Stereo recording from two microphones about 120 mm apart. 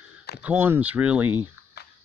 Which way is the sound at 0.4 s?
15° right (ahead or behind).